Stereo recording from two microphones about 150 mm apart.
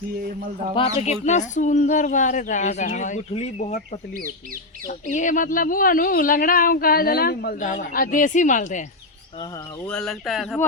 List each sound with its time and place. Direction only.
0.8 s speech: 45° left (ahead or behind)
4.9 s speech: 55° left (ahead or behind)
9.8 s speech: 5° left (ahead or behind)